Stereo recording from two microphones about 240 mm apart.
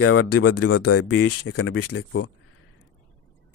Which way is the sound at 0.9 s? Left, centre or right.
Left.